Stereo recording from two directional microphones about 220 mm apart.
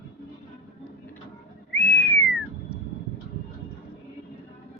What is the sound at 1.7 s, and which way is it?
Whistling, 5° left (ahead or behind).